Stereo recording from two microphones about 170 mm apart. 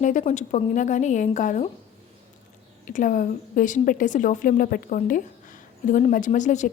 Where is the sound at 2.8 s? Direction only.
50° left (ahead or behind).